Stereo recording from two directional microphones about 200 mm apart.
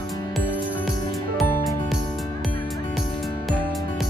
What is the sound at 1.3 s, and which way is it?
Music, centre (ahead or behind).